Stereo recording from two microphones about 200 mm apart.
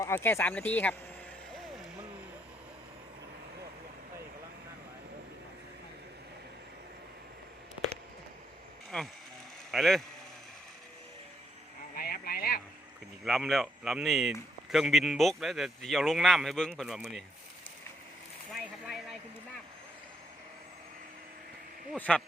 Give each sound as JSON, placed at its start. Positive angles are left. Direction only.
{"t": 0.0, "sound": "speech", "side_deg": 10}
{"t": 1.5, "sound": "vehicle", "side_deg": 0}
{"t": 8.9, "sound": "speech", "side_deg": 5}
{"t": 11.9, "sound": "a sound", "side_deg": 45}
{"t": 13.2, "sound": "speech", "side_deg": 0}
{"t": 18.9, "sound": "speech", "side_deg": 0}
{"t": 21.9, "sound": "speech", "side_deg": 5}